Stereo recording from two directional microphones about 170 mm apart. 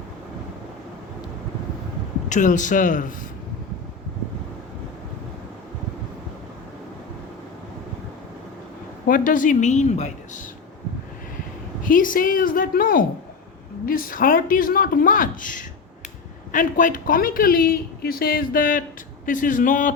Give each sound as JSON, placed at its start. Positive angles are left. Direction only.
{"t": 2.3, "sound": "a woman's voice", "side_deg": 50}
{"t": 9.0, "sound": "a woman's voice", "side_deg": 55}
{"t": 11.8, "sound": "speech", "side_deg": 55}